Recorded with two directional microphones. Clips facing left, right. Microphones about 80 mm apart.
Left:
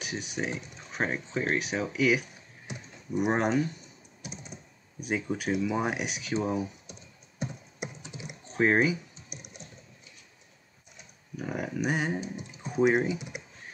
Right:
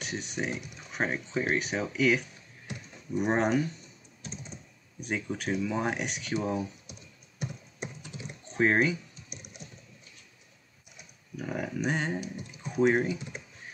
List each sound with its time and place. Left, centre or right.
0.0 s speech: centre
2.6 s typing: centre
3.2 s speech: centre
4.2 s computer keyboard: centre
5.0 s speech: centre
8.0 s typing: centre
8.5 s typing: centre
11.3 s speech: centre
12.2 s typing: left
12.8 s speech: centre